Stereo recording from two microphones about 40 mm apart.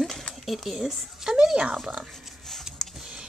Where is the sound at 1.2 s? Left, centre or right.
Centre.